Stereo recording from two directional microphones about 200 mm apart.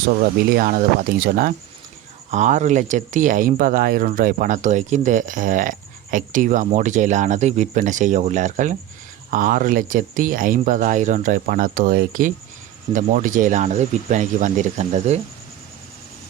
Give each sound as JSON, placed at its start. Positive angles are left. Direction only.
{"t": 0.3, "sound": "speech", "side_deg": -50}